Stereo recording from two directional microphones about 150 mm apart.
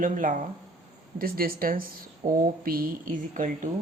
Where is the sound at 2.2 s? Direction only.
60° right (ahead or behind).